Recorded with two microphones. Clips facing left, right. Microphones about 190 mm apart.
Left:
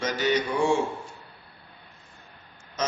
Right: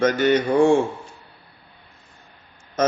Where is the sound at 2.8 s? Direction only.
55° right (ahead or behind).